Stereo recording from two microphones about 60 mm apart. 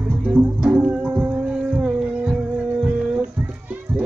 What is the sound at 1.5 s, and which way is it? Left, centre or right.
Heart sounds, centre.